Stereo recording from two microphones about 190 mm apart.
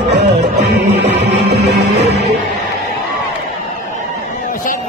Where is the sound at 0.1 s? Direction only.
65° right (ahead or behind).